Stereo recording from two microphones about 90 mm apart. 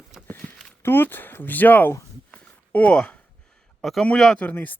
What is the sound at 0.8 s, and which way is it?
Speech, 25° left (ahead or behind).